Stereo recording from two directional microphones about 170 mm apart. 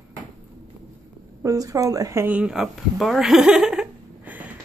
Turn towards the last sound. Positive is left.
turn(degrees=-5)  # may be behind; listen again after turning